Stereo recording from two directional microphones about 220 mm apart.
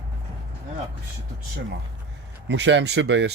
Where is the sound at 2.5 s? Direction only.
55° right (ahead or behind).